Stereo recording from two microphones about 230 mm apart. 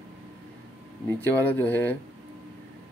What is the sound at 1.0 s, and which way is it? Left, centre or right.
Speech, centre.